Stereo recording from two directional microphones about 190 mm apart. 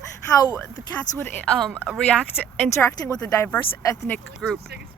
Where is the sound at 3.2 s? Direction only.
10° left (ahead or behind).